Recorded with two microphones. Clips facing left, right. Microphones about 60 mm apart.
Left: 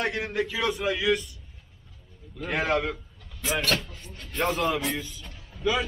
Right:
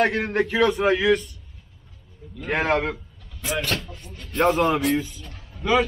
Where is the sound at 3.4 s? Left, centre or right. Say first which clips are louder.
Even; centre.